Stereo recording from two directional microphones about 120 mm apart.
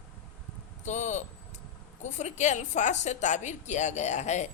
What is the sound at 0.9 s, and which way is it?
A woman's voice, 80° left.